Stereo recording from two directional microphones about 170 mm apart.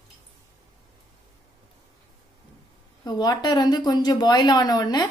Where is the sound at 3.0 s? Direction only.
25° left (ahead or behind).